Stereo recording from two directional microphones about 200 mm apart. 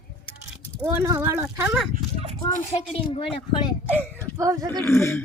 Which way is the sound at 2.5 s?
30° left (ahead or behind).